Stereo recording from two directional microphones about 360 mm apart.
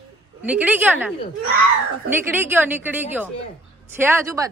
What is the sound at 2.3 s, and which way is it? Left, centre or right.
A woman's voice, centre.